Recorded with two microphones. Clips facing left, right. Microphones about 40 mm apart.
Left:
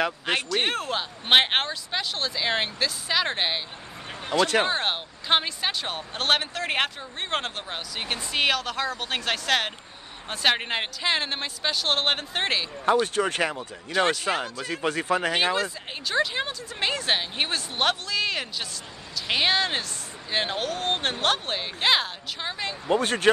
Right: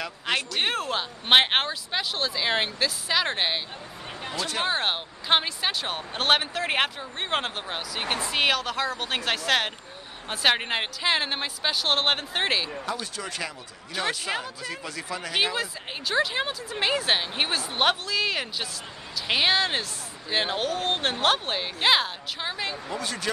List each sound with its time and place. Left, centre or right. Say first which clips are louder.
0.5 s speech: left 1 dB; centre
4.6 s speech: even; centre
13.0 s speech: left 9 dB; left
15.5 s speech: left 3 dB; centre
22.8 s speech: left 14 dB; left